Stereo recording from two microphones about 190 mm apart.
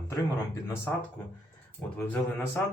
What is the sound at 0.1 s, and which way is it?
Speech, 15° left (ahead or behind).